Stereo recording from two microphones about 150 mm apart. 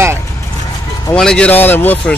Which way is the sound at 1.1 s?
5° left (ahead or behind).